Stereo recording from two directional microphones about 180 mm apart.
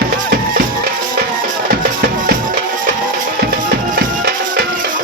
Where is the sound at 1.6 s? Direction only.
55° right (ahead or behind).